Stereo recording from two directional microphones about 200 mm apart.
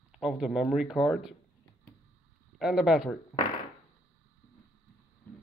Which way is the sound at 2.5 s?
Centre (ahead or behind).